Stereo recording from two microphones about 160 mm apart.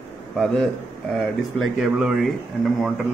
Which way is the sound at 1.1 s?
Centre (ahead or behind).